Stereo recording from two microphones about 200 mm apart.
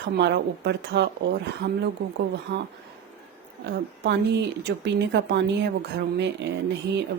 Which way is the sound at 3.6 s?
60° right (ahead or behind).